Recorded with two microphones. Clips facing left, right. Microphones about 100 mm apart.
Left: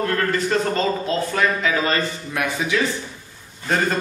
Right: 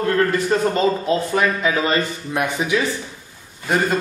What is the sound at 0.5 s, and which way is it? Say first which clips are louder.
Speech: right 3 dB; 15° right (ahead or behind).